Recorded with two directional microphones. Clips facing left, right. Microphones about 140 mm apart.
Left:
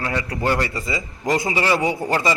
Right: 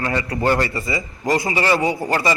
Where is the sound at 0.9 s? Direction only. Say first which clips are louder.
Right 1 dB; 20° left (ahead or behind).